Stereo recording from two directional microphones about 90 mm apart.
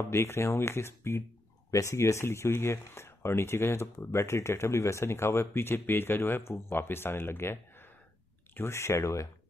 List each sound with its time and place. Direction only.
0.1 s speech: 30° left (ahead or behind)